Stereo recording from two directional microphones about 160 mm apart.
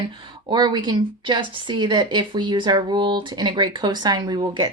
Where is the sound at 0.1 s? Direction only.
30° right (ahead or behind).